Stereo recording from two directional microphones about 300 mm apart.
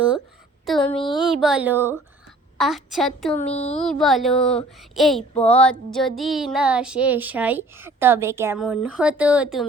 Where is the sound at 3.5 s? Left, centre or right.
Left.